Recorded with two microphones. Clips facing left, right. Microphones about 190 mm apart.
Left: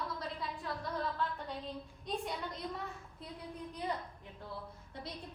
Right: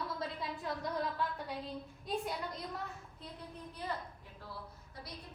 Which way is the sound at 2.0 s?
Centre (ahead or behind).